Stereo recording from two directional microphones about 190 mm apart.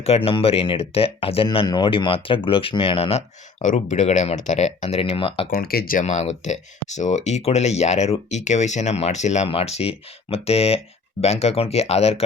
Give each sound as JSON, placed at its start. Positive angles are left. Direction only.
{"t": 0.0, "sound": "speech", "side_deg": 30}
{"t": 5.5, "sound": "speech", "side_deg": 50}